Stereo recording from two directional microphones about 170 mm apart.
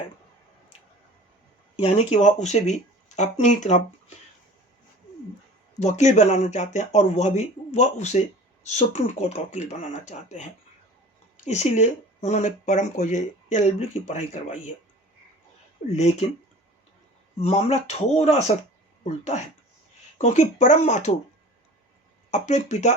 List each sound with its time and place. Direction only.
1.9 s speech: 40° left (ahead or behind)
5.8 s speech: 45° left (ahead or behind)
15.9 s speech: 40° left (ahead or behind)
17.4 s speech: 40° left (ahead or behind)
22.3 s speech: 45° left (ahead or behind)